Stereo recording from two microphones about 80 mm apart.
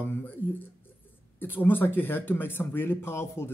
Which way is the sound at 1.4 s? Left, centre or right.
Left.